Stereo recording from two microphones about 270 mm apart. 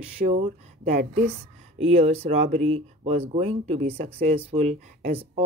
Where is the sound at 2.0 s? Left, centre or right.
Right.